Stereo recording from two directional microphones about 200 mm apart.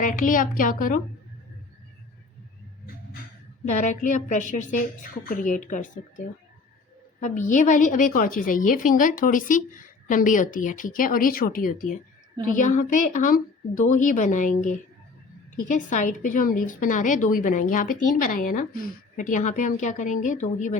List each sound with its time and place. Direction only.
0.0 s a woman's voice: 40° left (ahead or behind)
3.7 s a woman's voice: 35° left (ahead or behind)